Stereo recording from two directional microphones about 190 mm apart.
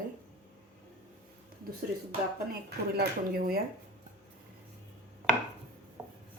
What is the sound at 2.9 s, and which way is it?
Speech, 50° right (ahead or behind).